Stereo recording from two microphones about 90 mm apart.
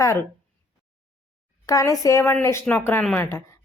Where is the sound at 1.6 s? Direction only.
40° left (ahead or behind).